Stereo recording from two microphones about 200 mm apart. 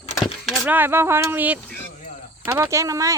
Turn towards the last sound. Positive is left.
turn(degrees=-15)  # may be behind; listen again after turning